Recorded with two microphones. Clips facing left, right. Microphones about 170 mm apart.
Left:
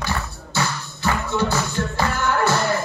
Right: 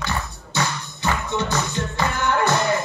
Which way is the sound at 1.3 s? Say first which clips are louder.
Left 2 dB; 20° right (ahead or behind).